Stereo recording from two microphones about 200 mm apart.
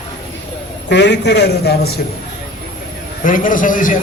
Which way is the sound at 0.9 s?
60° left (ahead or behind).